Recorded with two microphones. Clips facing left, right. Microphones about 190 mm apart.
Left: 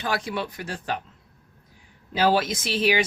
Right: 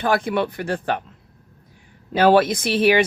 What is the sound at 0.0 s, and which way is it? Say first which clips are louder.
Speech: right 8 dB; 55° right (ahead or behind).